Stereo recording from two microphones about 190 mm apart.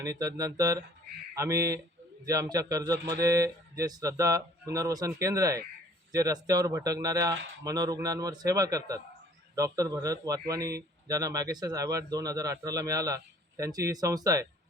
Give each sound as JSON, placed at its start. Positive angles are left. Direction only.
{"t": 0.0, "sound": "speech", "side_deg": -20}